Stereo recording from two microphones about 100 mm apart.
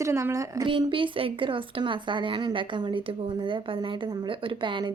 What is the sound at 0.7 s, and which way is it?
Speech, 55° right (ahead or behind).